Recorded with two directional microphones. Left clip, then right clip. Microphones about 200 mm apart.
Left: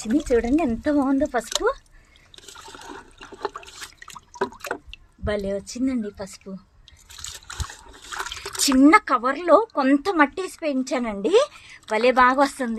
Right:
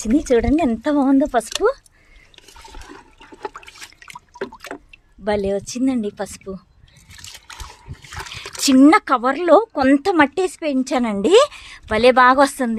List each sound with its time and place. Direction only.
0.3 s speech: 40° right (ahead or behind)
2.7 s toilet flush: 10° right (ahead or behind)
5.2 s speech: 40° right (ahead or behind)
8.6 s speech: 40° right (ahead or behind)